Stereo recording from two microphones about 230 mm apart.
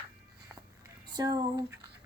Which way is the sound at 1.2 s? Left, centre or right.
Centre.